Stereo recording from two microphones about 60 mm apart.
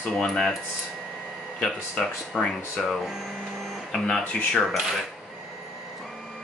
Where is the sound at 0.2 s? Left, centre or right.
Centre.